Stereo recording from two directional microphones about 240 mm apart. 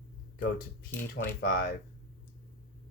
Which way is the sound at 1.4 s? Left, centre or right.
Left.